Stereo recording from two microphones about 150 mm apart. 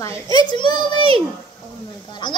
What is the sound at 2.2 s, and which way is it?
Speech, 30° left (ahead or behind).